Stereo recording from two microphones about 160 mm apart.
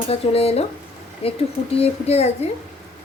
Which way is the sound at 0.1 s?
40° left (ahead or behind).